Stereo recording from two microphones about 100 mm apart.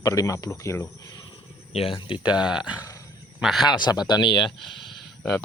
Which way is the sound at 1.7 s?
70° left (ahead or behind).